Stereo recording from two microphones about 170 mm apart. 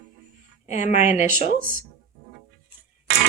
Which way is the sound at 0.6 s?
40° left (ahead or behind).